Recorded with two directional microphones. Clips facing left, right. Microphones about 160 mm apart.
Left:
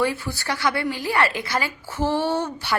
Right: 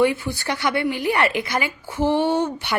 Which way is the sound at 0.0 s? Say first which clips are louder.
Right 4 dB; 20° right (ahead or behind).